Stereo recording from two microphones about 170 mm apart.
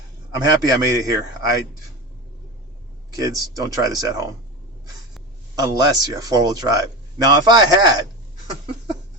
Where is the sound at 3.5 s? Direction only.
20° right (ahead or behind).